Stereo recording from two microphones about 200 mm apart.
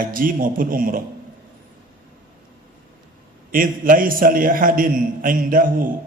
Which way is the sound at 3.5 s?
45° right (ahead or behind).